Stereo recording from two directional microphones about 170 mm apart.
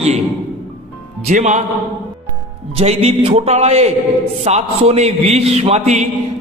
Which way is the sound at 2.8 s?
35° right (ahead or behind).